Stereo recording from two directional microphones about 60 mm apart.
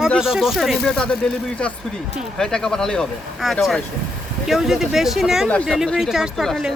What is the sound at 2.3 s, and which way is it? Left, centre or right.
Speech, centre.